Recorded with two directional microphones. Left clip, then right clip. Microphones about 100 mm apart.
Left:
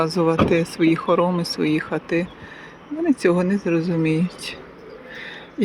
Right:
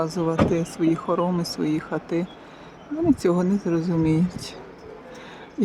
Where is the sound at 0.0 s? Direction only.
5° right (ahead or behind).